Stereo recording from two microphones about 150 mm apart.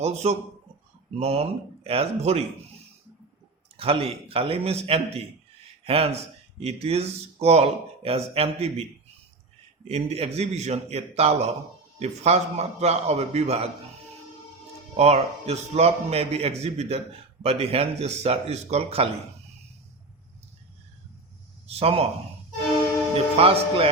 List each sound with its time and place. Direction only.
0.0 s speech: 45° right (ahead or behind)
3.8 s speech: 40° right (ahead or behind)
14.9 s speech: 45° right (ahead or behind)
21.7 s speech: 40° right (ahead or behind)
23.4 s speech: 40° right (ahead or behind)